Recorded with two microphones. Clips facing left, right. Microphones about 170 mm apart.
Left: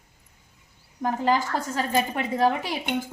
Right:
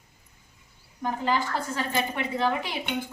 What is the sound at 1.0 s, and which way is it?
A woman's voice, 40° left (ahead or behind).